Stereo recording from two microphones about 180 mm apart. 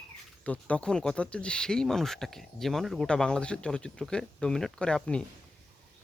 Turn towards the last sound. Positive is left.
turn(degrees=5)  # may be behind; listen again after turning